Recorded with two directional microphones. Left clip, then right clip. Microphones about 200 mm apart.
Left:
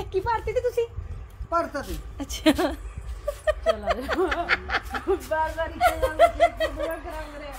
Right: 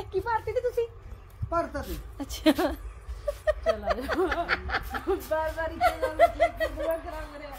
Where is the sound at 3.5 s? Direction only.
10° right (ahead or behind).